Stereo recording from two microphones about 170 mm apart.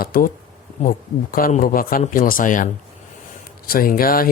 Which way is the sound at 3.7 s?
60° left (ahead or behind).